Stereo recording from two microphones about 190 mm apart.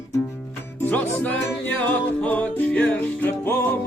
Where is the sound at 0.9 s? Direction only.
10° left (ahead or behind).